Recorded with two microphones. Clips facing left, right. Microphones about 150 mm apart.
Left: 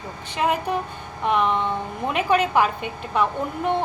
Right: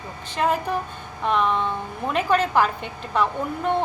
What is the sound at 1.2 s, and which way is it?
A woman's voice, 15° left (ahead or behind).